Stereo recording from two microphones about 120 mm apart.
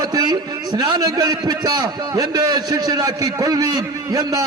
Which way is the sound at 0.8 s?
30° right (ahead or behind).